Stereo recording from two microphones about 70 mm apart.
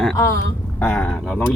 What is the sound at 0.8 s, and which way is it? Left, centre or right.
Speech, centre.